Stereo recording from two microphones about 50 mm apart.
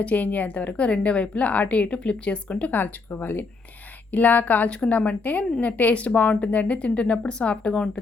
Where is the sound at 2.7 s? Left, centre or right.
Left.